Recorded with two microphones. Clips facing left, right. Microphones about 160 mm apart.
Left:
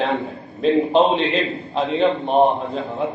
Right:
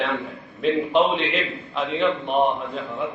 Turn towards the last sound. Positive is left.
turn(degrees=35)  # may be behind; listen again after turning